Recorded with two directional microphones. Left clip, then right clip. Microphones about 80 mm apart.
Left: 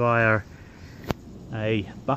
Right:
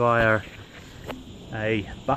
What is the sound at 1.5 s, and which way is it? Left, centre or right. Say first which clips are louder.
Speech: right 1 dB; left.